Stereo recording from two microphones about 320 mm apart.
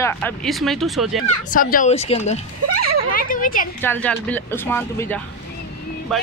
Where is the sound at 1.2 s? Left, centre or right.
Left.